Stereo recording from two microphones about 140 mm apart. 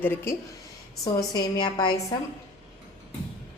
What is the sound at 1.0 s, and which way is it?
A woman's voice, 30° left (ahead or behind).